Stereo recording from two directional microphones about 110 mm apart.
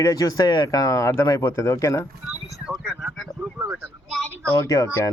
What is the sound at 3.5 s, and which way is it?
Speech, 20° right (ahead or behind).